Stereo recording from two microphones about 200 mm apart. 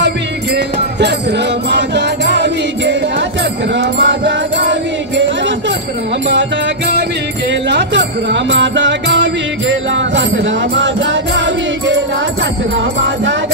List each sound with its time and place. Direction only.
1.7 s music: 60° right (ahead or behind)
4.0 s music: 60° right (ahead or behind)
7.7 s music: 60° right (ahead or behind)